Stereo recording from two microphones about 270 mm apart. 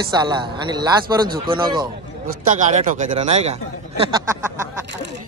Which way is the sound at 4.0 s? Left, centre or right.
Centre.